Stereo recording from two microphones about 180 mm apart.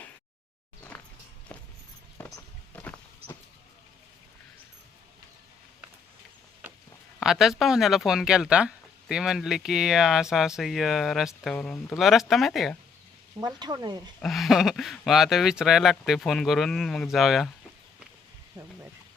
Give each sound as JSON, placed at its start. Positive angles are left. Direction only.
{"t": 0.9, "sound": "music", "side_deg": 10}
{"t": 1.5, "sound": "a sound", "side_deg": 10}
{"t": 2.1, "sound": "walk", "side_deg": 10}
{"t": 7.2, "sound": "speech", "side_deg": 0}
{"t": 13.4, "sound": "speech", "side_deg": -20}
{"t": 14.2, "sound": "speech", "side_deg": 0}